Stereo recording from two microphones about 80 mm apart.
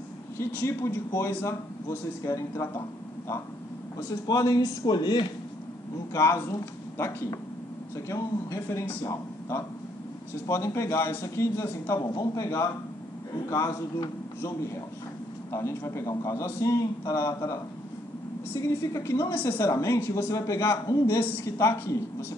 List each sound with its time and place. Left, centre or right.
0.4 s a man's voice: left
4.1 s a man's voice: left
6.1 s a man's voice: left
10.4 s a man's voice: left
15.5 s a man's voice: left
20.8 s a man's voice: left
21.5 s a man's voice: left